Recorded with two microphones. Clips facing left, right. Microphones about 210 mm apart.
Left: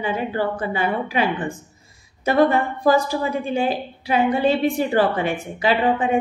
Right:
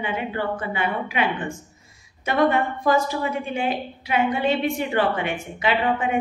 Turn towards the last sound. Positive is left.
turn(degrees=30)  # may be behind; listen again after turning